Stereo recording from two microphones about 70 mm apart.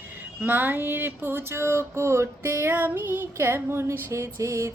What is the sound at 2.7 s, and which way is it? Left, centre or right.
Female singing, right.